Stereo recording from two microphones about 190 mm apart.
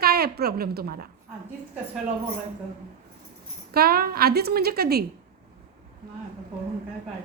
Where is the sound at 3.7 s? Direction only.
50° right (ahead or behind).